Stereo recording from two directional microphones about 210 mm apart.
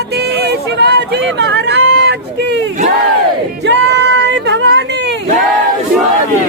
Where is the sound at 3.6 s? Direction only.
55° right (ahead or behind).